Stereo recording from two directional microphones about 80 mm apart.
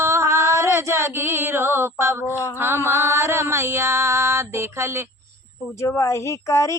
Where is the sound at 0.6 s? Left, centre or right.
Right.